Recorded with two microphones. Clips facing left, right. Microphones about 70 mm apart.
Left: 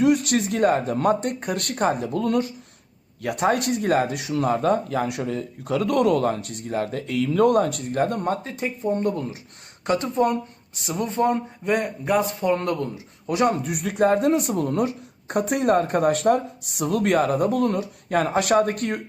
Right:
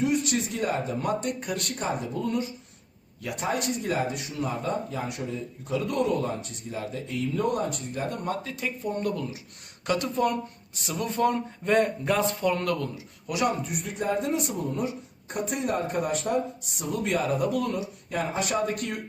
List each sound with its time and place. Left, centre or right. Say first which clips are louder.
0.0 s speech: left 6 dB; left
3.2 s speech: left 7 dB; left
7.9 s speech: left 11 dB; left
8.5 s a man's voice: left 6 dB; left
11.6 s a man's voice: right 3 dB; centre; by 13.6 s left
13.6 s a woman's voice: left 10 dB; left